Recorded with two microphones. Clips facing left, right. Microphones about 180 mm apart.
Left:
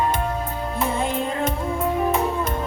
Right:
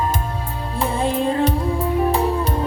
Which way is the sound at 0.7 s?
30° right (ahead or behind).